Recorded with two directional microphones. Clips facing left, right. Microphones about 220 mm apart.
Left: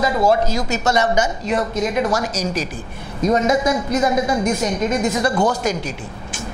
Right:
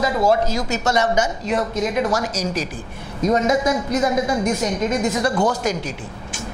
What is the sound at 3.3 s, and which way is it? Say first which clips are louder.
A woman's voice: left 1 dB; 20° left (ahead or behind).